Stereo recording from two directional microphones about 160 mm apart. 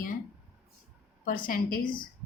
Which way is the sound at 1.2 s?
60° left (ahead or behind).